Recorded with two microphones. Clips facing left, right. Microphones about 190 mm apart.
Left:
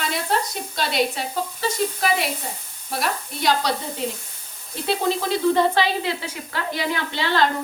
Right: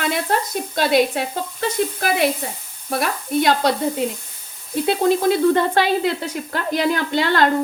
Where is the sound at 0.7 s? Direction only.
55° right (ahead or behind).